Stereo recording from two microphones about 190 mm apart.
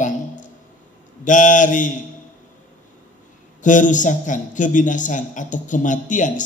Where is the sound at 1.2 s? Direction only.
40° left (ahead or behind).